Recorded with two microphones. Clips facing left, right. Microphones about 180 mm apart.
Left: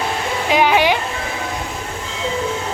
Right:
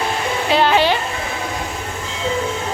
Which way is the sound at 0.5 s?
15° left (ahead or behind).